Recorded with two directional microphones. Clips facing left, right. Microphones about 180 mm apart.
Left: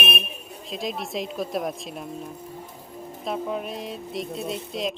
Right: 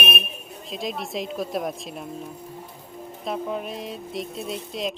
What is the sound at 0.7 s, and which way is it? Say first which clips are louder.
Speech: even; centre (ahead or behind).